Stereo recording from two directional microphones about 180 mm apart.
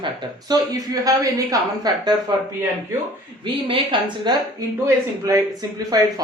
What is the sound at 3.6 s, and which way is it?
Speech, 30° right (ahead or behind).